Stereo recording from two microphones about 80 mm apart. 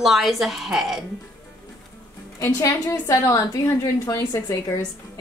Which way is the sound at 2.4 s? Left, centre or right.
Left.